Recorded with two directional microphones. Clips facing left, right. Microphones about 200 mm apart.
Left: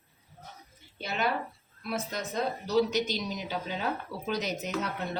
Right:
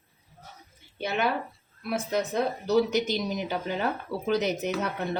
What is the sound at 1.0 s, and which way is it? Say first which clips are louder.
Speech: right 3 dB; 60° right (ahead or behind).